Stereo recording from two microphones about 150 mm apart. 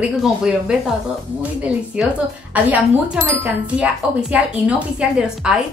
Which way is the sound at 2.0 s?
10° right (ahead or behind).